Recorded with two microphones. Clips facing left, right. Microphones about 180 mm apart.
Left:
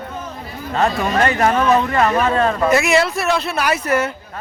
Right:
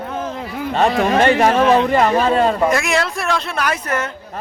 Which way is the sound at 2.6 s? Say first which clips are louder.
Left 3 dB; 5° left (ahead or behind).